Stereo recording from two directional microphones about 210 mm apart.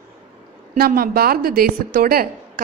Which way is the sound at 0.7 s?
45° right (ahead or behind).